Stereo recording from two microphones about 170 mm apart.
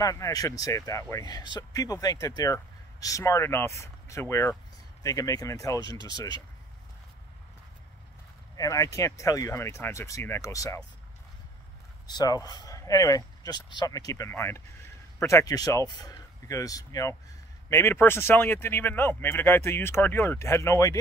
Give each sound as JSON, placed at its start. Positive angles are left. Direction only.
{"t": 0.0, "sound": "speech", "side_deg": 20}
{"t": 8.5, "sound": "speech", "side_deg": 20}
{"t": 12.1, "sound": "speech", "side_deg": 25}